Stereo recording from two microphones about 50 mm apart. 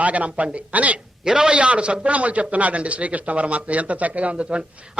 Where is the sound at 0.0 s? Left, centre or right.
Right.